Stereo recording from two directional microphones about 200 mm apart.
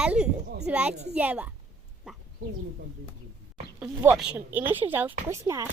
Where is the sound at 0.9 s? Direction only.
35° right (ahead or behind).